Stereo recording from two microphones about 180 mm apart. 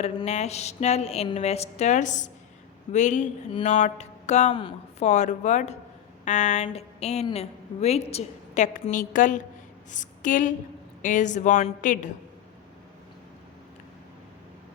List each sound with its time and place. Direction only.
0.0 s speech: 35° left (ahead or behind)
4.5 s a woman's voice: 30° left (ahead or behind)
5.0 s a woman's voice: 40° left (ahead or behind)